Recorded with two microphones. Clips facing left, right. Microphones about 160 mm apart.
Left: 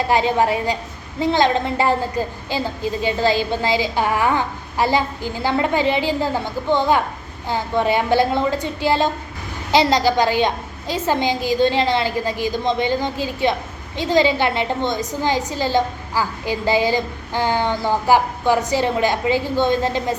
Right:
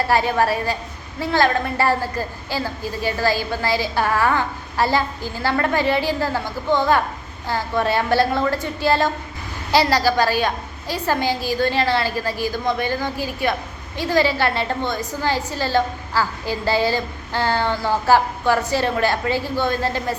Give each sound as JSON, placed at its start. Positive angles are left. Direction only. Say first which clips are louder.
{"t": 0.1, "sound": "a woman's voice", "louder": "left 2 dB", "side_deg": 20}